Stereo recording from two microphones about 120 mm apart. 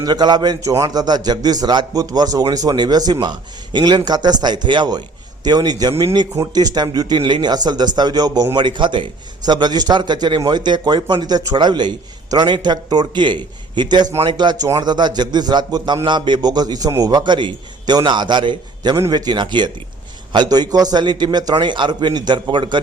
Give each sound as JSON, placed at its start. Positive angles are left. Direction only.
{"t": 0.0, "sound": "a man's voice", "side_deg": -35}